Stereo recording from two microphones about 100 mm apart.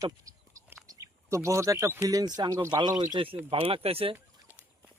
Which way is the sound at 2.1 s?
40° right (ahead or behind).